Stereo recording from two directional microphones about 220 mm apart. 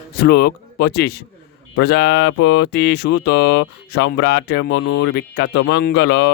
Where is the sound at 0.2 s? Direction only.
45° left (ahead or behind).